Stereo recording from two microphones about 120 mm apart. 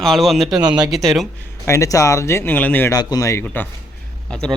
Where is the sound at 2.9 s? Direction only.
30° left (ahead or behind).